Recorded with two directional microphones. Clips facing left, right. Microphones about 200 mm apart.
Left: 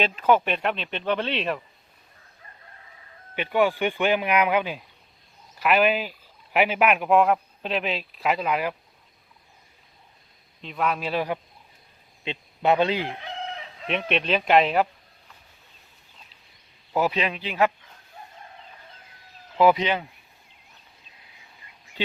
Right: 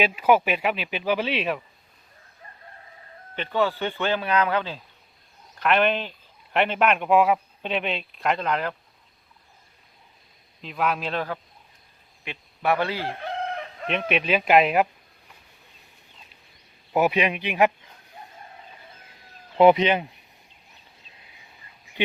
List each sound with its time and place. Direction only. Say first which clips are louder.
0.0 s speech: right 1 dB; 10° right (ahead or behind)
3.3 s speech: left 2 dB; 15° left (ahead or behind)
10.6 s speech: even; centre (ahead or behind)
12.2 s speech: left 3 dB; 20° left (ahead or behind)
13.1 s chicken: right 5 dB; 50° right (ahead or behind)
13.8 s speech: even; centre (ahead or behind)
16.9 s speech: right 3 dB; 15° right (ahead or behind)
19.5 s speech: right 3 dB; 20° right (ahead or behind)